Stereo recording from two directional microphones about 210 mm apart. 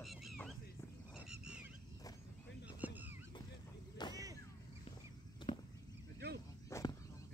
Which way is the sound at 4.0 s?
20° left (ahead or behind).